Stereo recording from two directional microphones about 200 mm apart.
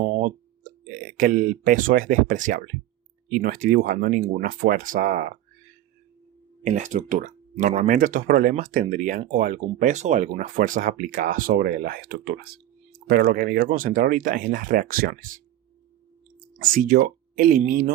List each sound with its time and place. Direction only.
0.0 s speech: 35° right (ahead or behind)
6.7 s speech: 40° right (ahead or behind)
16.6 s speech: 45° right (ahead or behind)